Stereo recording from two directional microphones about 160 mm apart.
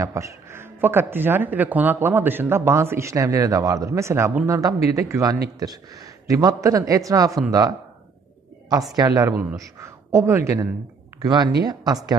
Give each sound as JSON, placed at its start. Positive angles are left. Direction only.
{"t": 0.0, "sound": "a man's voice", "side_deg": -20}
{"t": 8.9, "sound": "a man's voice", "side_deg": -25}